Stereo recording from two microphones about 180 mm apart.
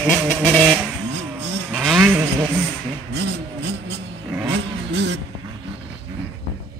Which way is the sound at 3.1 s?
70° right (ahead or behind).